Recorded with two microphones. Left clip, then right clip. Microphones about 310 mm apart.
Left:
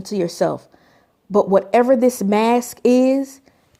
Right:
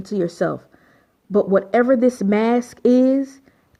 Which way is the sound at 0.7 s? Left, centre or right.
Centre.